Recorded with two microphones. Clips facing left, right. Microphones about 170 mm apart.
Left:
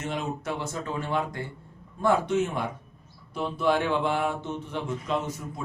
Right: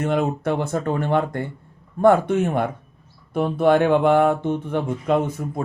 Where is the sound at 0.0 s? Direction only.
55° right (ahead or behind).